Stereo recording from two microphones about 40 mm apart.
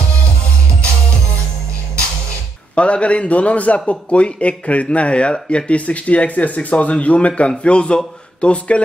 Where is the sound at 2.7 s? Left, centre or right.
Left.